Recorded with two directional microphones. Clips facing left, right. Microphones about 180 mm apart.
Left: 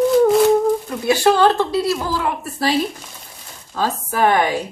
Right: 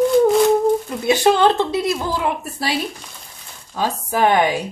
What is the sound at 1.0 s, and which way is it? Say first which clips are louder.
Speech: even; 20° right (ahead or behind).